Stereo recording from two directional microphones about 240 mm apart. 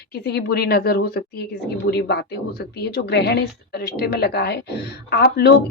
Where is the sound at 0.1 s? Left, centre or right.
Left.